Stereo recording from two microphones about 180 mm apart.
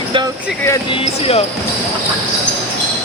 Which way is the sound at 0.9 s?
30° left (ahead or behind).